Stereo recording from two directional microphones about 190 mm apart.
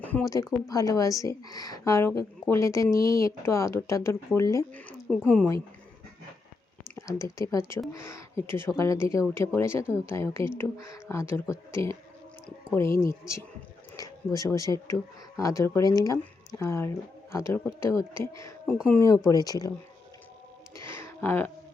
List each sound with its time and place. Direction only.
0.0 s a woman's voice: 10° left (ahead or behind)
6.9 s a woman's voice: 15° left (ahead or behind)
18.7 s speech: 5° left (ahead or behind)
20.9 s a sound: 10° left (ahead or behind)